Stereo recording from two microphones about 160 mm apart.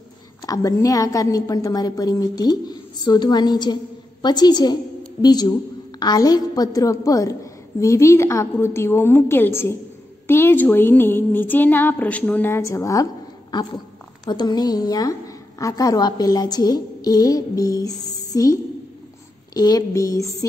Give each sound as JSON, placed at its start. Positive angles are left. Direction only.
{"t": 0.4, "sound": "a woman's voice", "side_deg": 20}